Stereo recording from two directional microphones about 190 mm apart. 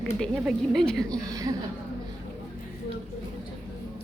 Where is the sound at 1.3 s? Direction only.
20° right (ahead or behind).